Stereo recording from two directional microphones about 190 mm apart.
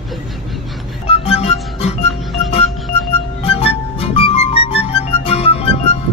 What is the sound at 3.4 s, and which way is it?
Music, 30° left (ahead or behind).